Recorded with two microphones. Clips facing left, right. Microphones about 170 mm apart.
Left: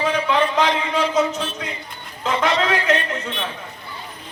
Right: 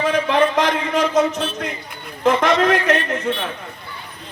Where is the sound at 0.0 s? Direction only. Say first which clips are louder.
Right 3 dB; 60° right (ahead or behind).